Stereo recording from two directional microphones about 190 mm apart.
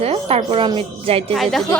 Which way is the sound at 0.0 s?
30° right (ahead or behind).